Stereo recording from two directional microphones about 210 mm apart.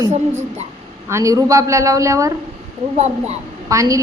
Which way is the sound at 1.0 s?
15° right (ahead or behind).